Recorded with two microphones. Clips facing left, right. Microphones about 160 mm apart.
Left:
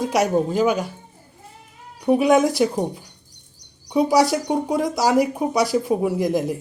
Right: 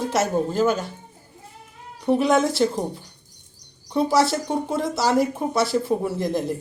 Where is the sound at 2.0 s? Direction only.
10° left (ahead or behind).